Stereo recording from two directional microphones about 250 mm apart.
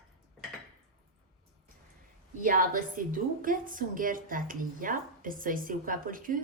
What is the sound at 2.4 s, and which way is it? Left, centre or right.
A woman's voice, right.